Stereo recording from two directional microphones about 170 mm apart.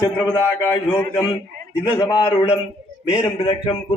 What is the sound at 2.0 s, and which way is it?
A man's voice, 25° left (ahead or behind).